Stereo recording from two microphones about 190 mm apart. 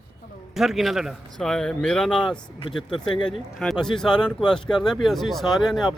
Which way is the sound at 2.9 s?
25° left (ahead or behind).